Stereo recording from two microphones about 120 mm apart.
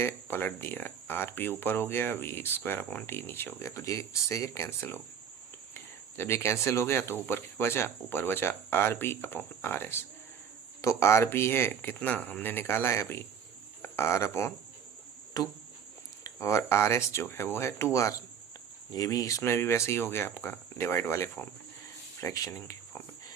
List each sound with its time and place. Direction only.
0.0 s speech: 20° left (ahead or behind)
15.3 s cricket: 35° left (ahead or behind)
16.2 s speech: 25° left (ahead or behind)